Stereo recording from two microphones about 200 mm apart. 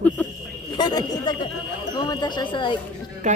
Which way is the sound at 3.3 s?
35° right (ahead or behind).